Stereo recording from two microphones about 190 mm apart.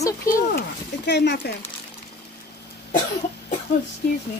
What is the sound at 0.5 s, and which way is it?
Speech, 60° left (ahead or behind).